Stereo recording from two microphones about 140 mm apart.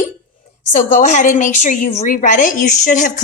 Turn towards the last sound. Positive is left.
turn(degrees=65)  # may be behind; listen again after turning